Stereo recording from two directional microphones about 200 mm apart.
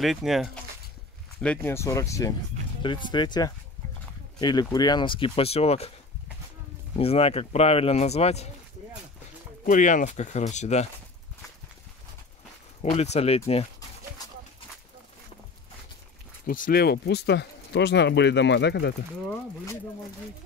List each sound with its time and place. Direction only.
0.0 s speech: centre (ahead or behind); by 5.9 s 30° left (ahead or behind)
7.0 s speech: 30° left (ahead or behind)
9.7 s speech: 40° left (ahead or behind)
12.9 s speech: 30° left (ahead or behind)
16.4 s speech: 45° left (ahead or behind); by 18.9 s 60° left (ahead or behind)